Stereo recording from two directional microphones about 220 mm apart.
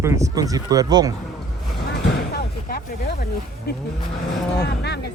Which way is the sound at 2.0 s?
50° left (ahead or behind).